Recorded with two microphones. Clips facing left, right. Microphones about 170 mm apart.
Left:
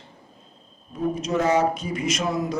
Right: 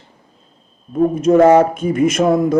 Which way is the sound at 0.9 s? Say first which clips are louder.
Right 12 dB; 50° right (ahead or behind).